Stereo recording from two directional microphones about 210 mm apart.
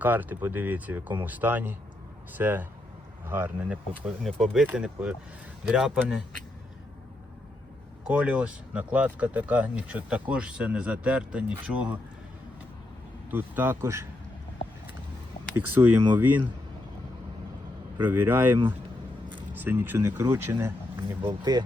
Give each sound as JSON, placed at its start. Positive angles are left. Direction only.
{"t": 0.0, "sound": "speech", "side_deg": -10}
{"t": 8.0, "sound": "speech", "side_deg": -5}
{"t": 13.3, "sound": "speech", "side_deg": -10}
{"t": 15.7, "sound": "speech", "side_deg": -10}
{"t": 17.9, "sound": "speech", "side_deg": -10}